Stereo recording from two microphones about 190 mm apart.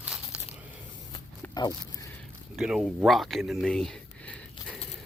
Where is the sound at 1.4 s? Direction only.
20° left (ahead or behind).